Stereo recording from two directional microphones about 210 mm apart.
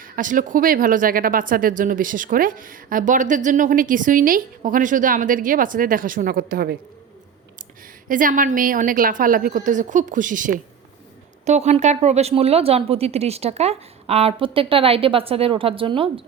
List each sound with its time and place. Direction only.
0.0 s a woman's voice: 40° right (ahead or behind)
8.0 s a woman's voice: 40° right (ahead or behind); by 16.2 s 25° right (ahead or behind)